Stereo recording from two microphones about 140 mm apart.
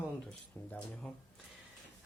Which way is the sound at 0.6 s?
15° left (ahead or behind).